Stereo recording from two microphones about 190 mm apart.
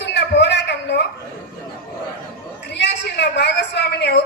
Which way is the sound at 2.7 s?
65° left (ahead or behind).